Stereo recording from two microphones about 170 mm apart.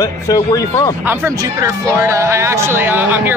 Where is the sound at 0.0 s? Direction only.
20° left (ahead or behind).